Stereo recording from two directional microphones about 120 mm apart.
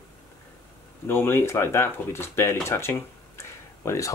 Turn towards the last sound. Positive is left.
turn(degrees=25)  # may be behind; listen again after turning